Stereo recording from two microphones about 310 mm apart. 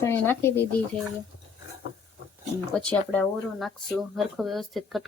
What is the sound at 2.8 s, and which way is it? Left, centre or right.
Speech, centre.